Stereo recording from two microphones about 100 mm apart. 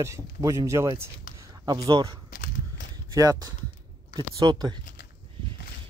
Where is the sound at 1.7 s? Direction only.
45° right (ahead or behind).